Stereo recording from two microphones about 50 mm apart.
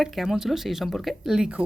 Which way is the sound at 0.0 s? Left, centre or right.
Centre.